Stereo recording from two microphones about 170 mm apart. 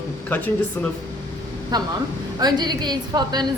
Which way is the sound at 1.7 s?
25° right (ahead or behind).